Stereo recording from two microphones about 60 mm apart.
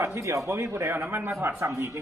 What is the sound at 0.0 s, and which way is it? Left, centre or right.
Speech, right.